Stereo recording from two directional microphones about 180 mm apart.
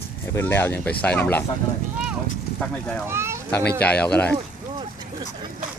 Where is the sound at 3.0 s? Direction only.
15° right (ahead or behind).